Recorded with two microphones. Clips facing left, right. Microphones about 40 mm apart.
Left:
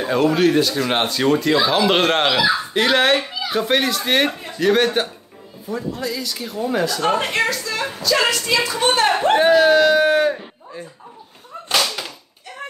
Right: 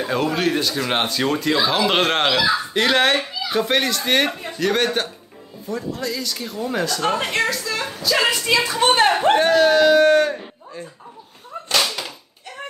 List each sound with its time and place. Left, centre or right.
0.0 s speech: centre
8.5 s a woman's voice: right
9.4 s speech: centre